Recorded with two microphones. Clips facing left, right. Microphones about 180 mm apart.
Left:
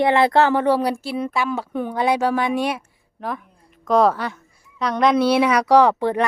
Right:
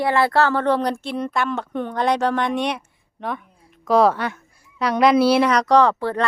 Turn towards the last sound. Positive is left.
turn(degrees=15)  # may be behind; listen again after turning